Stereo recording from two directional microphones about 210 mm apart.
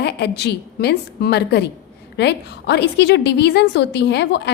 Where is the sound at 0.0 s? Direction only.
50° left (ahead or behind).